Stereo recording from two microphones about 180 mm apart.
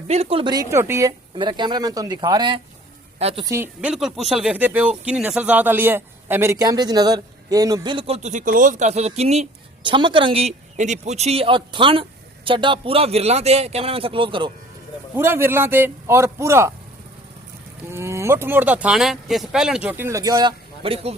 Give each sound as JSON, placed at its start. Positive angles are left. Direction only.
{"t": 0.1, "sound": "speech", "side_deg": -35}
{"t": 1.4, "sound": "speech", "side_deg": -25}
{"t": 3.2, "sound": "speech", "side_deg": -35}
{"t": 3.4, "sound": "speech", "side_deg": -15}
{"t": 3.8, "sound": "speech", "side_deg": -5}
{"t": 15.1, "sound": "speech", "side_deg": -15}
{"t": 17.9, "sound": "speech", "side_deg": -15}